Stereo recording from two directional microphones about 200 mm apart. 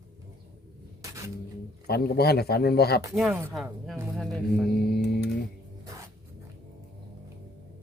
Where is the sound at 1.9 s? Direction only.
50° left (ahead or behind).